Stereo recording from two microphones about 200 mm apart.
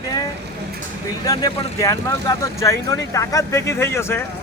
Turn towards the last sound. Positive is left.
turn(degrees=10)  # may be behind; listen again after turning